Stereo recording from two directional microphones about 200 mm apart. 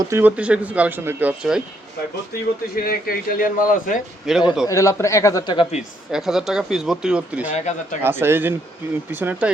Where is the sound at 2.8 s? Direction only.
50° left (ahead or behind).